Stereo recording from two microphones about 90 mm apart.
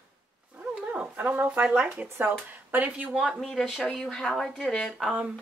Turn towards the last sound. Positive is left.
turn(degrees=-5)  # may be behind; listen again after turning